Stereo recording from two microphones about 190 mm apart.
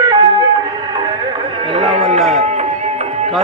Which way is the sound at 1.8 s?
30° right (ahead or behind).